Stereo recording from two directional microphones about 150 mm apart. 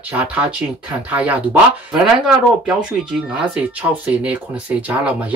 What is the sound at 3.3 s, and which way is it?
A man's voice, 10° right (ahead or behind).